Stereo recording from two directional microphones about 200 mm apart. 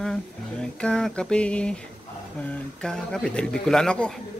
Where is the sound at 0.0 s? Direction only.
5° left (ahead or behind).